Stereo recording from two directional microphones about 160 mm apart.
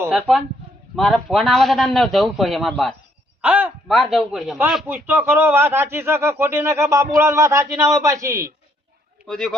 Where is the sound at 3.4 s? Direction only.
10° right (ahead or behind).